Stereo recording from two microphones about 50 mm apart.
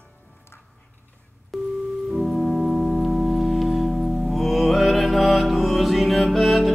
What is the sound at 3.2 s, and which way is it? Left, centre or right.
Music, centre.